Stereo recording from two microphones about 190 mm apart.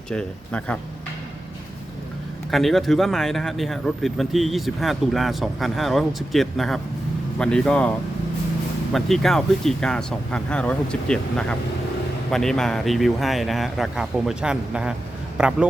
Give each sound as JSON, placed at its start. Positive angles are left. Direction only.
{"t": 0.1, "sound": "speech", "side_deg": 5}
{"t": 2.5, "sound": "speech", "side_deg": 0}